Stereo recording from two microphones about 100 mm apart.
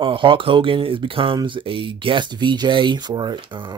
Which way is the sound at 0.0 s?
60° right (ahead or behind).